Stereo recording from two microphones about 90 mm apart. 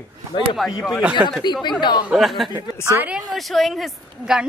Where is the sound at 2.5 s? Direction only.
25° right (ahead or behind).